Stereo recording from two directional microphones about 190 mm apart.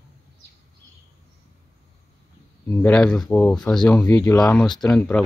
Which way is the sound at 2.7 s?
10° left (ahead or behind).